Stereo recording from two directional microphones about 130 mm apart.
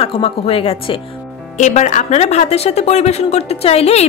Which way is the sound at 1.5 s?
65° left (ahead or behind).